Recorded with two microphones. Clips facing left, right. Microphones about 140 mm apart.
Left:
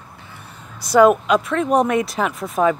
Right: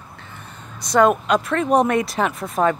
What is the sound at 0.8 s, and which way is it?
Speech, 5° left (ahead or behind).